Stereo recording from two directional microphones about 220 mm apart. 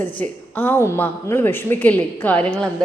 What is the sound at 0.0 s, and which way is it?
A woman's voice, 10° left (ahead or behind).